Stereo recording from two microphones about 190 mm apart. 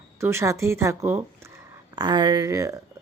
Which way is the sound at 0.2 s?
15° right (ahead or behind).